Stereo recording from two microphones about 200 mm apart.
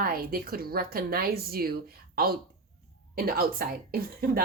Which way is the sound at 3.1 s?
45° right (ahead or behind).